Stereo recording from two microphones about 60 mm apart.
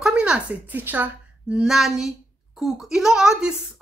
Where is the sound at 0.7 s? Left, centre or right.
Right.